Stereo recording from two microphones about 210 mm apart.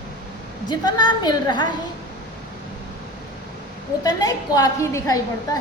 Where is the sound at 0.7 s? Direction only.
20° left (ahead or behind).